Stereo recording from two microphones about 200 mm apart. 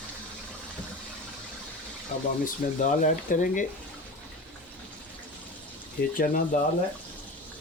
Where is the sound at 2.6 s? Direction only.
45° left (ahead or behind).